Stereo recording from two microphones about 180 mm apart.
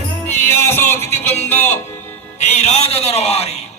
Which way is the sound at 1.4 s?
10° left (ahead or behind).